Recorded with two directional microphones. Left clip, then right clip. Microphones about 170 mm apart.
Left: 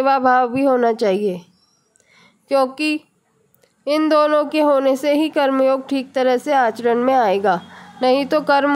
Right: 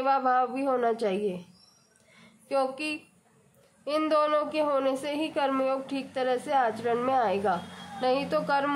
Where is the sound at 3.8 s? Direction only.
45° left (ahead or behind).